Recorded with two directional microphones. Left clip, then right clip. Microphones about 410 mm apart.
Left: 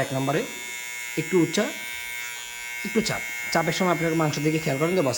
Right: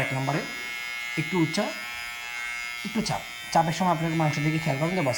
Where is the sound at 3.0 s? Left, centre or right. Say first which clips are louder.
Left 4 dB; centre.